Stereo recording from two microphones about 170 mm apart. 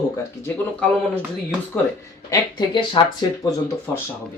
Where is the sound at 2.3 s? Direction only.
30° left (ahead or behind).